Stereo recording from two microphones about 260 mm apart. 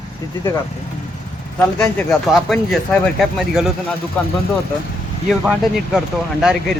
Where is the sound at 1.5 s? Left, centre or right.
Centre.